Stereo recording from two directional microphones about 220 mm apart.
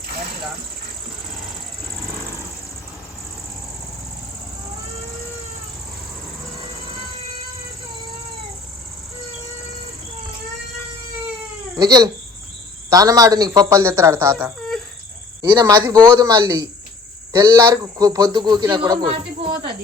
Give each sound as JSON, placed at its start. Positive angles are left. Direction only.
{"t": 11.8, "sound": "speech", "side_deg": -15}